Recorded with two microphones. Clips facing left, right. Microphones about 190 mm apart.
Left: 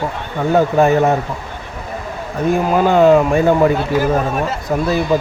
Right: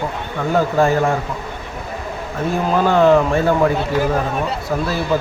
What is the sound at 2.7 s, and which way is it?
A man's voice, 15° left (ahead or behind).